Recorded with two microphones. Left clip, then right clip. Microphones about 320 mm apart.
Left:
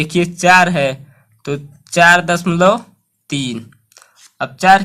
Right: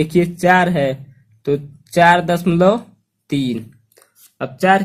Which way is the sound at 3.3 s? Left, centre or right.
Left.